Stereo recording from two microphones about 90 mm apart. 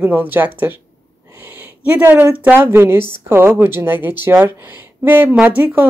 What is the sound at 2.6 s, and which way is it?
Speech, 25° right (ahead or behind).